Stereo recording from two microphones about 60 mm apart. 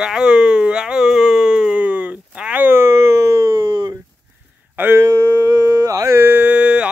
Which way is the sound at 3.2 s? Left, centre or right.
Right.